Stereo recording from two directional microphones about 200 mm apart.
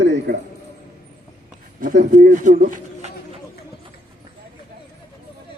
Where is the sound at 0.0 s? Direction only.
60° right (ahead or behind).